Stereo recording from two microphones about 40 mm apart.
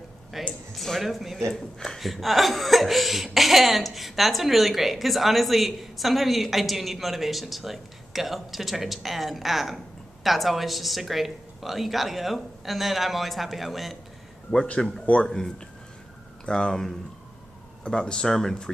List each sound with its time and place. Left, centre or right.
0.3 s speech: centre
1.5 s speech: centre
2.0 s speech: centre
14.8 s speech: centre
16.4 s speech: centre